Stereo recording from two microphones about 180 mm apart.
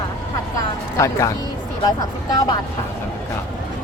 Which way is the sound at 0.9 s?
15° left (ahead or behind).